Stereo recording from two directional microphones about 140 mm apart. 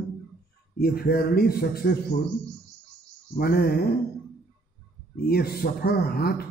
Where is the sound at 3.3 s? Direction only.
90° left.